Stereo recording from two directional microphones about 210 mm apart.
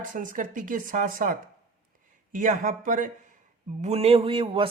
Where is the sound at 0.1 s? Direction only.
40° right (ahead or behind).